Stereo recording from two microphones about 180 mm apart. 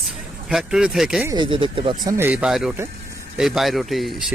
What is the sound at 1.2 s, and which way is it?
Speech, 20° right (ahead or behind).